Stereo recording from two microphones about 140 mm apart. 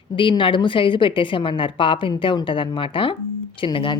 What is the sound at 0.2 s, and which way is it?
A woman's voice, 35° left (ahead or behind).